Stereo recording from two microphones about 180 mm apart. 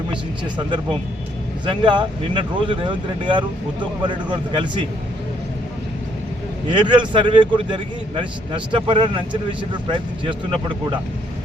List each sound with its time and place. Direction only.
1.6 s speech: 25° right (ahead or behind)
6.7 s speech: 25° right (ahead or behind)